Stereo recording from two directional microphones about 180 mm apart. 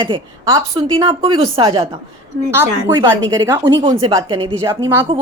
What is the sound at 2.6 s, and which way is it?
A woman's voice, 15° right (ahead or behind).